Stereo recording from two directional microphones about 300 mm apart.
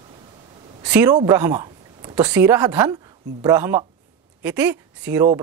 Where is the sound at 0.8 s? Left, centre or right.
Centre.